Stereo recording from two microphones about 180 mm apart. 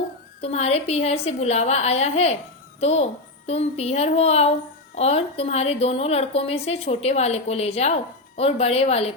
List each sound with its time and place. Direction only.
0.4 s a woman's voice: 35° left (ahead or behind)